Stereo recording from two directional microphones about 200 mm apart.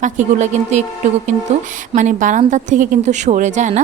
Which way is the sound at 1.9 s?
40° right (ahead or behind).